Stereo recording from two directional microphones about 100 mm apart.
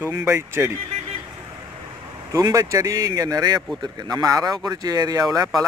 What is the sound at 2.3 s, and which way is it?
Speech, 35° right (ahead or behind).